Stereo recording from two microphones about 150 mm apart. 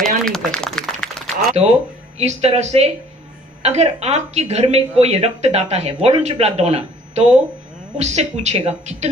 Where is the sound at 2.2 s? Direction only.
45° right (ahead or behind).